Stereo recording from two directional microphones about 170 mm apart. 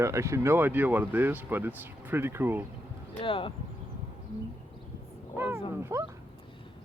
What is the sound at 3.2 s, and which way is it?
Speech, 30° left (ahead or behind).